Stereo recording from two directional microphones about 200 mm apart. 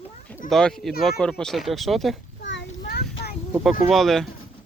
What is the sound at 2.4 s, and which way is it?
Child singing, 60° left (ahead or behind).